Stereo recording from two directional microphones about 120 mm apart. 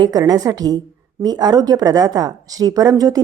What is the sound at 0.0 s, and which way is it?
Speech, 30° right (ahead or behind).